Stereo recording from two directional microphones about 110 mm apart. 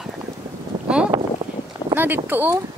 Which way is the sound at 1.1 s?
40° right (ahead or behind).